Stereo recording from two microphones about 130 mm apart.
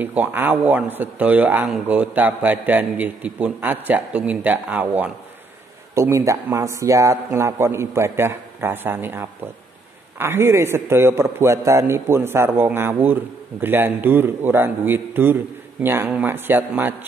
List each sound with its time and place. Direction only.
0.0 s a man's voice: 15° right (ahead or behind)
5.9 s a man's voice: 20° right (ahead or behind)